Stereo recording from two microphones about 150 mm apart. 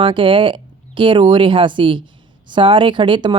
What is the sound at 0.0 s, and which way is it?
Speech, 35° right (ahead or behind).